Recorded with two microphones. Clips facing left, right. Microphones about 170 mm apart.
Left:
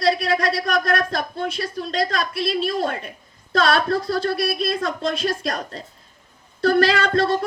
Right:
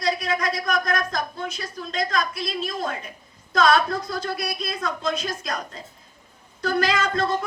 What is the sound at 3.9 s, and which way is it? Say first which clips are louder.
A woman's voice: left 6 dB; 30° left (ahead or behind).